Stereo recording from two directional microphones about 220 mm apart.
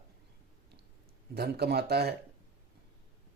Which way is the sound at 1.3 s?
45° right (ahead or behind).